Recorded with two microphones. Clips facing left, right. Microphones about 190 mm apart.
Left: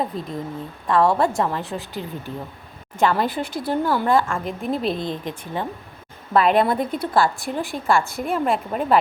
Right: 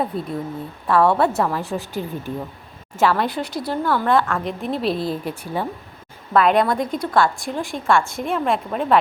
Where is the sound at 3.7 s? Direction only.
15° left (ahead or behind).